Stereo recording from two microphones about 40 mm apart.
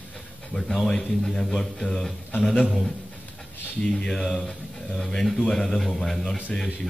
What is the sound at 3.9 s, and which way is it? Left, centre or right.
A man's voice, centre.